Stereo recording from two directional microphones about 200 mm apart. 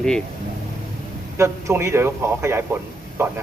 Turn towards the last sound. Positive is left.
turn(degrees=-15)  # may be behind; listen again after turning